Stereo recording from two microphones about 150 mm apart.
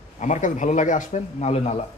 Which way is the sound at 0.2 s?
50° left (ahead or behind).